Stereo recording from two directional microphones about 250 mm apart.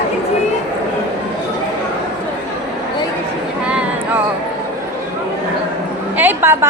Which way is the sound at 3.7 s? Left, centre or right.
Centre.